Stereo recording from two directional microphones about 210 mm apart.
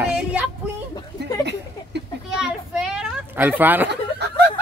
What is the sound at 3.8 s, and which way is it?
Snicker, 55° right (ahead or behind).